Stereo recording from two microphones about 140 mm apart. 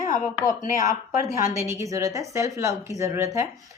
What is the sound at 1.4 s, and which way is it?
Speech, 20° right (ahead or behind).